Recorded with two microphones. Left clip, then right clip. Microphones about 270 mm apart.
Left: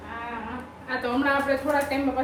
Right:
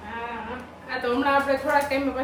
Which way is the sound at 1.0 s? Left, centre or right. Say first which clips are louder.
Right 2 dB; centre.